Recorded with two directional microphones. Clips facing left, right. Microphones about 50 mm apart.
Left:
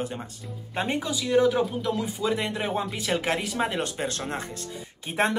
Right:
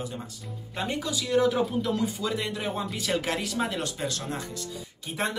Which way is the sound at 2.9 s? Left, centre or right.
Centre.